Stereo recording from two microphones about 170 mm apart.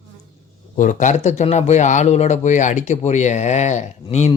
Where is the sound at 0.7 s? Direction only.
50° left (ahead or behind).